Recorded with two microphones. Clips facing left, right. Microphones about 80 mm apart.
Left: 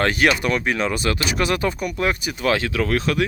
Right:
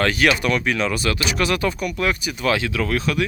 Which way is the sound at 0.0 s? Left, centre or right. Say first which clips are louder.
Even; left.